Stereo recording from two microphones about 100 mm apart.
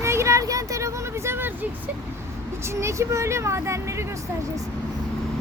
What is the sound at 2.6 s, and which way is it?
Vehicle, 25° right (ahead or behind).